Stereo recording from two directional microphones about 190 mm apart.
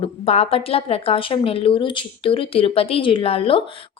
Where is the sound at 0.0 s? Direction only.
30° left (ahead or behind).